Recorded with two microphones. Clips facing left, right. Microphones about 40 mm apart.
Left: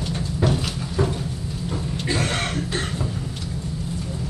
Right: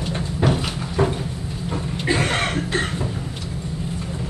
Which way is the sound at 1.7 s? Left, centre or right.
Right.